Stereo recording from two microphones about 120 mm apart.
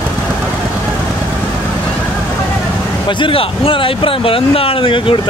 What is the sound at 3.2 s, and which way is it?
Speech, 50° left (ahead or behind).